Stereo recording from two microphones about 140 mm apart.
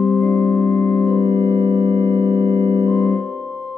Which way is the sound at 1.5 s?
60° right (ahead or behind).